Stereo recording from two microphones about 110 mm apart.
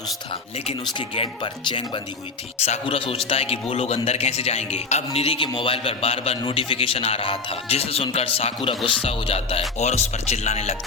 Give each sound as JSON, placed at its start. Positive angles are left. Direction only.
{"t": 0.9, "sound": "speech", "side_deg": 50}
{"t": 2.6, "sound": "a man's voice", "side_deg": 75}
{"t": 2.8, "sound": "speech", "side_deg": 55}
{"t": 6.4, "sound": "speech", "side_deg": 50}
{"t": 9.0, "sound": "music", "side_deg": 65}